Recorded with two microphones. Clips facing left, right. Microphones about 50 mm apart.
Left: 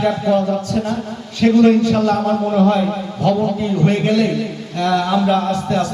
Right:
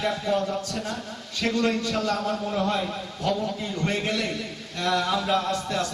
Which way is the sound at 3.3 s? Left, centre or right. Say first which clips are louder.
Left 9 dB; left.